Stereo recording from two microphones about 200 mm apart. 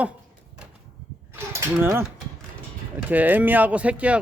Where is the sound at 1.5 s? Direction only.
15° right (ahead or behind).